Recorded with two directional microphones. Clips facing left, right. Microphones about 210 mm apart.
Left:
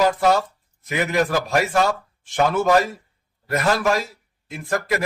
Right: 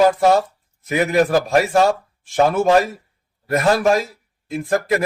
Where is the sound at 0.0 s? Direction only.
30° right (ahead or behind).